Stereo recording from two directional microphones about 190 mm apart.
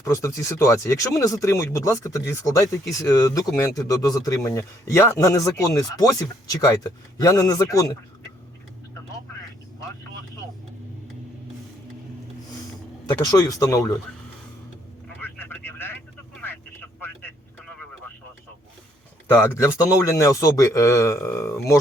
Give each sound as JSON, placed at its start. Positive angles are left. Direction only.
{"t": 0.0, "sound": "speech", "side_deg": 15}
{"t": 13.1, "sound": "speech", "side_deg": 20}
{"t": 15.2, "sound": "vehicle", "side_deg": 10}
{"t": 19.3, "sound": "speech", "side_deg": 15}